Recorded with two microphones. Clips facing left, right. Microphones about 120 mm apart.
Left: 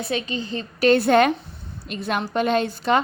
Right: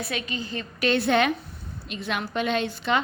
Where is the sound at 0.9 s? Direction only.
40° left (ahead or behind).